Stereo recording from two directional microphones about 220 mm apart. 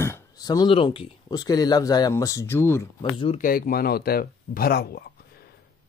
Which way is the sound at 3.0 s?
25° left (ahead or behind).